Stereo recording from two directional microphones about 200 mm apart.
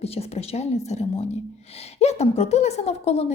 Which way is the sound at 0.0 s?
30° left (ahead or behind).